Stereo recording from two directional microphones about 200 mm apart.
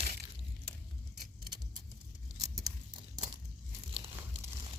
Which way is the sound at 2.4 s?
20° right (ahead or behind).